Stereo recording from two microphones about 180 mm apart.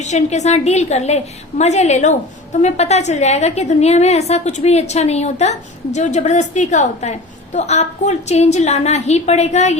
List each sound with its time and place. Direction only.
0.0 s a woman's voice: 40° left (ahead or behind)